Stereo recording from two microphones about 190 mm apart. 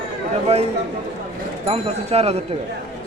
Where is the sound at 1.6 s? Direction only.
30° right (ahead or behind).